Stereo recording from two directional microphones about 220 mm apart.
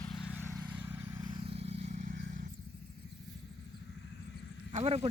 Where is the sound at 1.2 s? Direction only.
25° right (ahead or behind).